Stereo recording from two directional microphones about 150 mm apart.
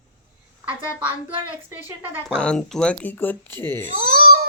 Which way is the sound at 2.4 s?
5° left (ahead or behind).